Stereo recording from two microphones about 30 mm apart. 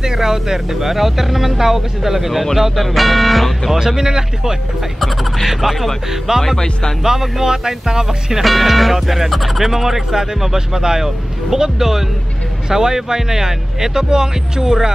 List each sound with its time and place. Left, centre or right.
0.0 s speech: centre
3.7 s speech: centre
5.5 s speech: centre
6.4 s speech: centre
7.0 s speech: centre
8.5 s speech: centre